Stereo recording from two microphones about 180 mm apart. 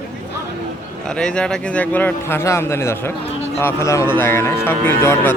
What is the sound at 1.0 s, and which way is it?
A man's voice, 5° left (ahead or behind).